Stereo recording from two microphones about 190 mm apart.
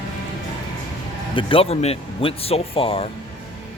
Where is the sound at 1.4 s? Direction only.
30° left (ahead or behind).